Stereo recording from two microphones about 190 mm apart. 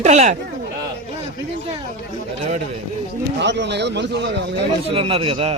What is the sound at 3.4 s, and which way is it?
A man's voice, 65° right (ahead or behind).